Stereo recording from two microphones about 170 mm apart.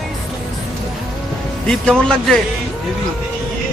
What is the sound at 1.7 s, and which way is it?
Speech, 5° left (ahead or behind).